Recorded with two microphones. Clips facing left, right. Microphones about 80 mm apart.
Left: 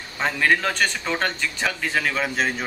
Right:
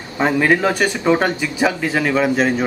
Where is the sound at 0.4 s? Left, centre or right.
Centre.